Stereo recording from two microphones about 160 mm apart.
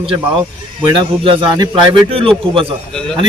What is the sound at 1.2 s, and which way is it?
A man's voice, 30° right (ahead or behind).